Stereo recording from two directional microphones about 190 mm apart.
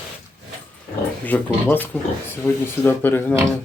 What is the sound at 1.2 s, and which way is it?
Speech, 10° left (ahead or behind).